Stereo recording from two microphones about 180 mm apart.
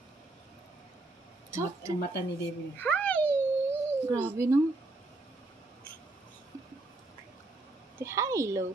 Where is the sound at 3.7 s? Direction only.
15° right (ahead or behind).